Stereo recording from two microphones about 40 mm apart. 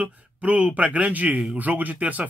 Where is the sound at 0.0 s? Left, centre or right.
Right.